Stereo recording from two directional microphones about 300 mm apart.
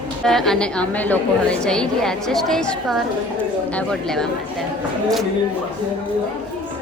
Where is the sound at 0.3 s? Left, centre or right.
Centre.